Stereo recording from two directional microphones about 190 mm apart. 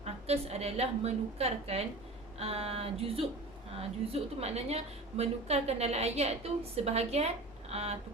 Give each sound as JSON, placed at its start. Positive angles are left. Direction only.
{"t": 0.0, "sound": "a woman's voice", "side_deg": -35}